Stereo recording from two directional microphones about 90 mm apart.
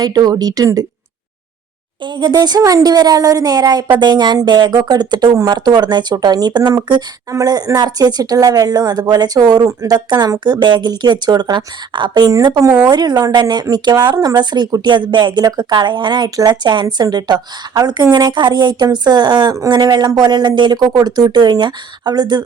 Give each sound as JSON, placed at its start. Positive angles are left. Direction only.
{"t": 0.0, "sound": "speech", "side_deg": -45}
{"t": 2.0, "sound": "speech", "side_deg": -55}
{"t": 7.3, "sound": "speech", "side_deg": -40}